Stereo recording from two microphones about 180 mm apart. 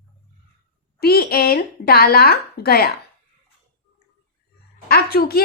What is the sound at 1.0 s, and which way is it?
A woman's voice, 60° left (ahead or behind).